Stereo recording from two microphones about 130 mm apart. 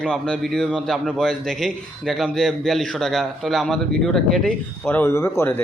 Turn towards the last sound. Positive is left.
turn(degrees=20)  # may be behind; listen again after turning